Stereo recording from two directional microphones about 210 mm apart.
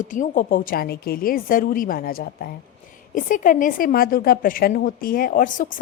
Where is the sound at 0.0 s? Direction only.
40° left (ahead or behind).